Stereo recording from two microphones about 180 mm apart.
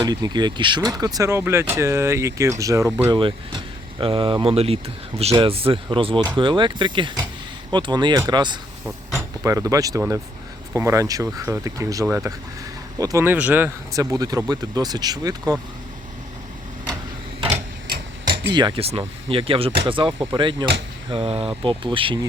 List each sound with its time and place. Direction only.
0.0 s speech: 25° right (ahead or behind)
3.2 s speech: 30° right (ahead or behind)
18.5 s speech: 30° right (ahead or behind)